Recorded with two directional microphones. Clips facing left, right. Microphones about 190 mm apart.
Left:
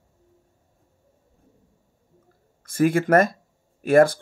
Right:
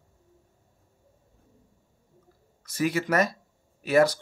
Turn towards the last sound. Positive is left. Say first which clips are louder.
# left 5 dB
turn(degrees=50)  # may be behind; listen again after turning